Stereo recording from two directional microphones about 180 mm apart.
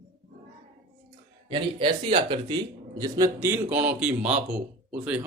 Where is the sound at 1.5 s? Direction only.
30° right (ahead or behind).